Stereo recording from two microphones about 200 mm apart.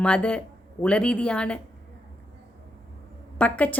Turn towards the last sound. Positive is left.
turn(degrees=5)  # may be behind; listen again after turning